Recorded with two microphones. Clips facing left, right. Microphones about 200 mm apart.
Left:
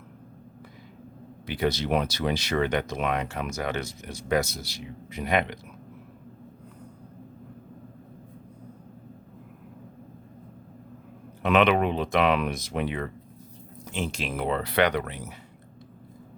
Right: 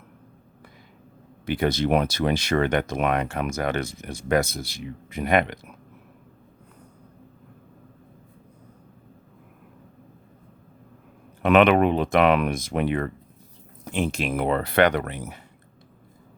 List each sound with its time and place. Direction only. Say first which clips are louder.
1.5 s speech: right 4 dB; 50° right (ahead or behind)
11.4 s speech: right 4 dB; 55° right (ahead or behind)